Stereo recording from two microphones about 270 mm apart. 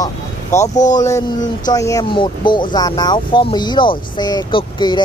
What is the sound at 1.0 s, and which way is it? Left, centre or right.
Speech, centre.